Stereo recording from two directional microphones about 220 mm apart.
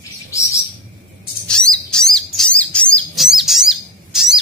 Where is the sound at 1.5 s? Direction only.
5° left (ahead or behind).